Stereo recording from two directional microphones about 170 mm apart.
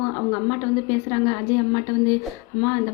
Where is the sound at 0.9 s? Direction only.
15° left (ahead or behind).